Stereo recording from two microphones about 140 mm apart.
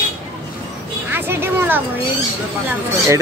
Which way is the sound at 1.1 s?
15° right (ahead or behind).